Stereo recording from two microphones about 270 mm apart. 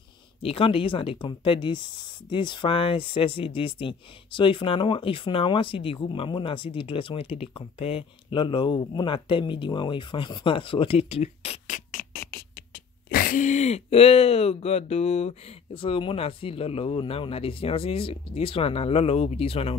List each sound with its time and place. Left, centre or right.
0.4 s speech: left